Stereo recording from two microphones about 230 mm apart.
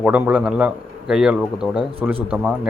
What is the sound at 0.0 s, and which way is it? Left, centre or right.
Speech, centre.